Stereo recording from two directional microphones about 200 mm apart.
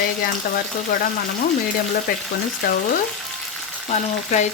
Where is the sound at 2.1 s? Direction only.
45° left (ahead or behind).